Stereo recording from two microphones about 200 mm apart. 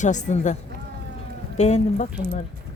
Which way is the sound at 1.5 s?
35° left (ahead or behind).